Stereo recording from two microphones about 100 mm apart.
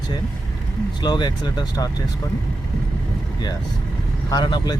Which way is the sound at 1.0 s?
45° left (ahead or behind).